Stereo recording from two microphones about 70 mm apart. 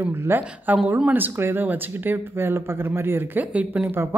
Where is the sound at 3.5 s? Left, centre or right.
Centre.